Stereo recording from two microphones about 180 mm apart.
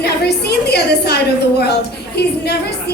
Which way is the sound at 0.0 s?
65° left (ahead or behind).